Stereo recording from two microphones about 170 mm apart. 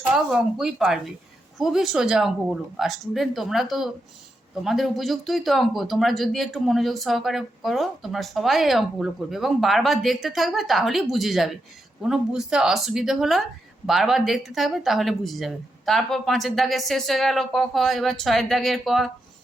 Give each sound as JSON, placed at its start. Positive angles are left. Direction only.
{"t": 0.3, "sound": "speech", "side_deg": -5}